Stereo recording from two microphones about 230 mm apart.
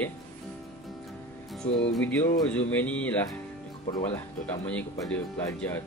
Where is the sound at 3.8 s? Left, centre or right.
Centre.